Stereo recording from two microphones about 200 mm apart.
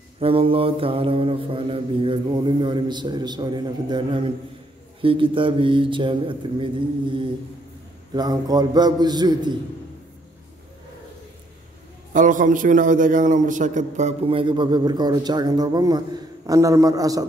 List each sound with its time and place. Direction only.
0.2 s mantra: 25° right (ahead or behind)
12.1 s a man's voice: 40° right (ahead or behind); by 17.3 s 15° right (ahead or behind)